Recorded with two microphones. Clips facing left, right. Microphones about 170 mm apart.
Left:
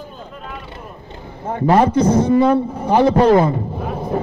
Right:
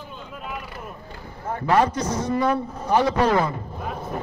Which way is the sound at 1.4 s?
25° left (ahead or behind).